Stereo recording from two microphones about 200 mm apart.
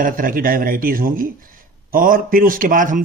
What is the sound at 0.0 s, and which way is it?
Speech, 45° right (ahead or behind).